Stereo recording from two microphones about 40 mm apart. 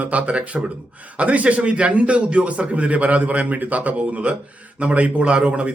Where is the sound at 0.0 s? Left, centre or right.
Right.